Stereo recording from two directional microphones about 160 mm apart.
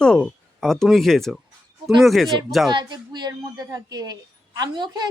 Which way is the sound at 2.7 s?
30° right (ahead or behind).